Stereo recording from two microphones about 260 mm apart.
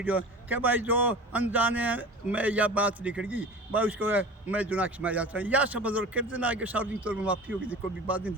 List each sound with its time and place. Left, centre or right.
0.0 s a man's voice: centre